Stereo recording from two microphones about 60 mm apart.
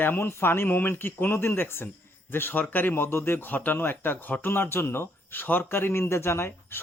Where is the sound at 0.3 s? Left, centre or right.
Left.